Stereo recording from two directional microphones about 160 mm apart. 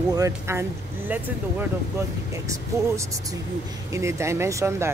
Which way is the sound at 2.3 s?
20° right (ahead or behind).